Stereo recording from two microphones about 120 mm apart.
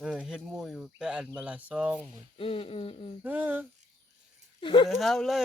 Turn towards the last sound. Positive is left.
turn(degrees=0)  # may be behind; listen again after turning